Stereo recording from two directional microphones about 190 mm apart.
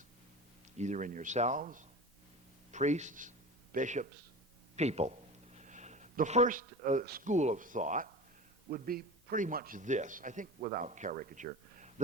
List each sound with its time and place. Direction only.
0.8 s a man's voice: 40° right (ahead or behind)